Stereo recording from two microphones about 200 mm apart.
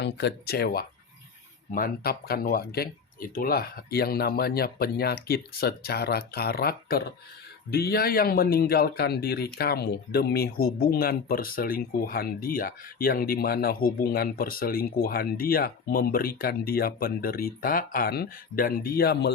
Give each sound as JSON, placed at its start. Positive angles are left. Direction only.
{"t": 0.0, "sound": "speech", "side_deg": 60}